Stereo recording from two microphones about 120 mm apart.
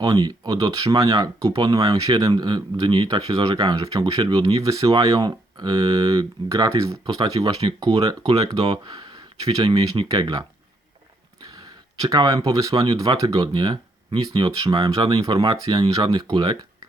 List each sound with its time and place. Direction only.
0.0 s speech: 35° right (ahead or behind)
7.0 s speech: 35° right (ahead or behind)
11.4 s speech: 35° right (ahead or behind)